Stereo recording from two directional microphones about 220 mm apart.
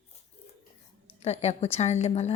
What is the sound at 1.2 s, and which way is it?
Speech, 30° left (ahead or behind).